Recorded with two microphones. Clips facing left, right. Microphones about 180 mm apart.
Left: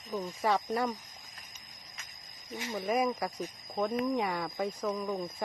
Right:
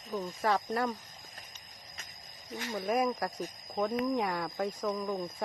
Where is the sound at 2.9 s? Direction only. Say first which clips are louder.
Even; 5° left (ahead or behind).